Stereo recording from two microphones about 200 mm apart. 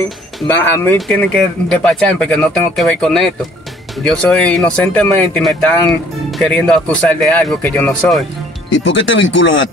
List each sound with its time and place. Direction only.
0.7 s speech: 10° left (ahead or behind)
8.6 s speech: 70° left (ahead or behind)